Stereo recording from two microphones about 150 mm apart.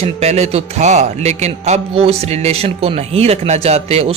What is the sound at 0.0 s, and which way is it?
A man's voice, 45° right (ahead or behind).